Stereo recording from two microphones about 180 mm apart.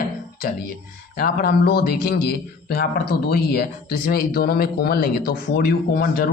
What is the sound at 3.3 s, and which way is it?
Speech, 55° left (ahead or behind).